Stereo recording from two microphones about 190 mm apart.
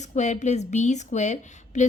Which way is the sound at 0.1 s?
40° left (ahead or behind).